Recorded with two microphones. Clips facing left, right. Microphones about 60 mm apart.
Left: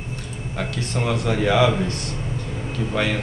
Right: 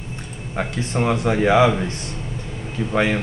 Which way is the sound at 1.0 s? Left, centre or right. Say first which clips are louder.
Right 3 dB; right.